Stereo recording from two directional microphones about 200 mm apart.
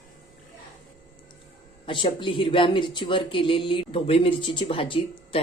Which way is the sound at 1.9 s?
25° left (ahead or behind).